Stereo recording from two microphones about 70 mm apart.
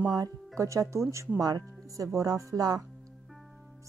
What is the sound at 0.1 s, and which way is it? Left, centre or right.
Speech, right.